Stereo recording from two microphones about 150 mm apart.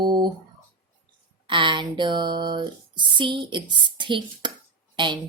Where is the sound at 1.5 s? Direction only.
30° right (ahead or behind).